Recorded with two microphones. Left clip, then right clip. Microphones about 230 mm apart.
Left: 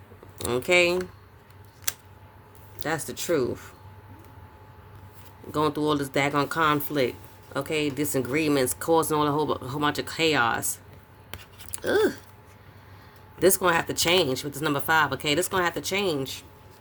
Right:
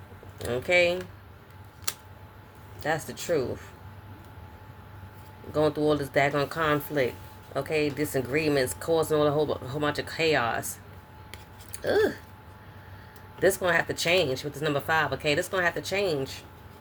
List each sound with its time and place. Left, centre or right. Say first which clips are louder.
0.3 s speech: left 2 dB; left
2.8 s speech: even; left
5.5 s speech: even; left
11.9 s speech: left 1 dB; left
13.4 s speech: left 2 dB; left